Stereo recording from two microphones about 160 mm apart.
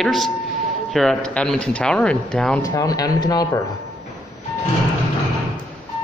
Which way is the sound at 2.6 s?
20° left (ahead or behind).